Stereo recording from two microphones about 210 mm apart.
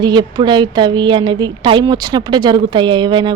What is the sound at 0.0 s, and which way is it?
Speech, 20° right (ahead or behind).